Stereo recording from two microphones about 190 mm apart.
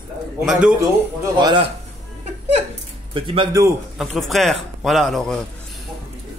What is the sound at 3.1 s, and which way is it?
Speech, 25° right (ahead or behind).